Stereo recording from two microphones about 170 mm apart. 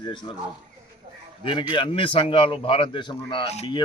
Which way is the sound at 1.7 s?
30° left (ahead or behind).